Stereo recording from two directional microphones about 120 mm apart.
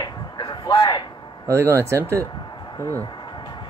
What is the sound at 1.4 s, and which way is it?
Speech, 20° right (ahead or behind).